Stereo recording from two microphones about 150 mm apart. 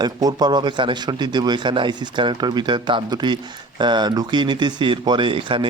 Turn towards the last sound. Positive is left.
turn(degrees=-35)  # may be behind; listen again after turning